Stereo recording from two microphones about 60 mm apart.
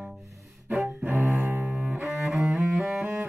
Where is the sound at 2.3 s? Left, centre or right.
Centre.